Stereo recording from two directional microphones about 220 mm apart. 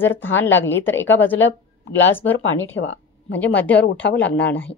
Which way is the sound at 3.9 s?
55° left (ahead or behind).